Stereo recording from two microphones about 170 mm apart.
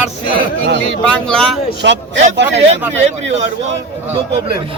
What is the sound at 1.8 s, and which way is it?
Speech, 90° right.